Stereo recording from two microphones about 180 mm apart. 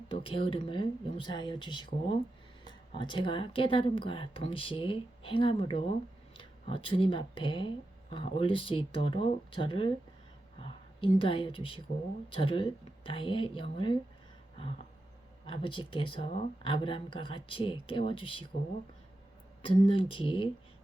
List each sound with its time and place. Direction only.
0.1 s a woman's voice: 30° left (ahead or behind)
15.4 s speech: 30° left (ahead or behind)
19.6 s speech: 30° left (ahead or behind)